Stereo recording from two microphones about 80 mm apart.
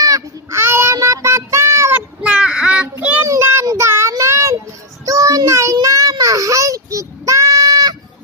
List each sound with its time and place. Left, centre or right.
0.0 s child singing: right
0.6 s child singing: right
0.9 s music: right
2.0 s child singing: centre
3.3 s child singing: right